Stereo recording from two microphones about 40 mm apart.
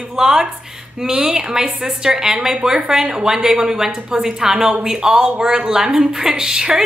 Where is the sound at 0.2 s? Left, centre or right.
Centre.